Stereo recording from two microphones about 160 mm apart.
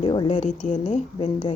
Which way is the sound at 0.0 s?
35° left (ahead or behind).